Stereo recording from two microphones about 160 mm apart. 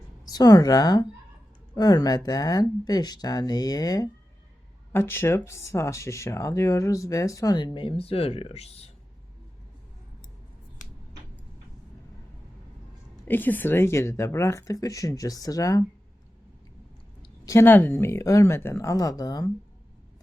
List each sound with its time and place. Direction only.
0.3 s speech: 25° left (ahead or behind); by 8.9 s 40° left (ahead or behind)
13.2 s speech: 10° left (ahead or behind)
17.4 s speech: 15° left (ahead or behind)